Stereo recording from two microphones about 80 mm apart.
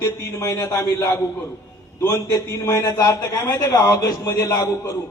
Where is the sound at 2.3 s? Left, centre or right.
Left.